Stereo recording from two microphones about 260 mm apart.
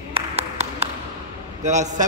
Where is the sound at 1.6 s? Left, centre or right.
Right.